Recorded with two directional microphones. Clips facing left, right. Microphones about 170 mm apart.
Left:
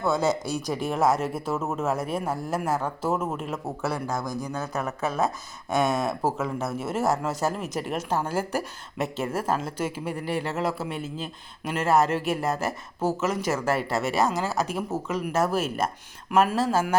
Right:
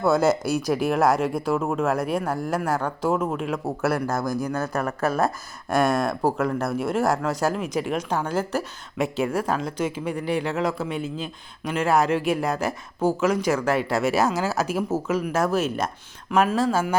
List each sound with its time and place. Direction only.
0.0 s speech: 5° right (ahead or behind)
4.6 s speech: 20° left (ahead or behind)
5.6 s speech: centre (ahead or behind)